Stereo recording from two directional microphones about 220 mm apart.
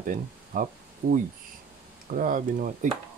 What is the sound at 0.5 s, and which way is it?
Speech, 40° right (ahead or behind).